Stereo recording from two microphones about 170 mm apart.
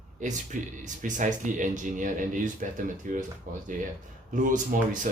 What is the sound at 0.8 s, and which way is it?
Speech, 50° right (ahead or behind).